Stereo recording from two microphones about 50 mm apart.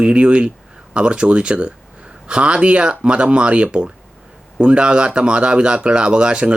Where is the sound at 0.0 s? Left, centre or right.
Right.